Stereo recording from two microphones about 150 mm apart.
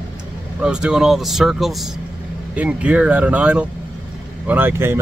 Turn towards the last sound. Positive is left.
turn(degrees=-15)  # may be behind; listen again after turning